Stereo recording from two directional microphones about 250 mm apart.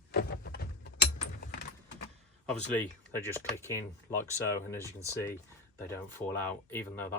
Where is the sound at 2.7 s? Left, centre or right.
Centre.